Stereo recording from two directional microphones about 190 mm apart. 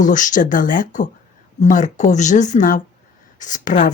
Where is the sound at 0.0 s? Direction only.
40° left (ahead or behind).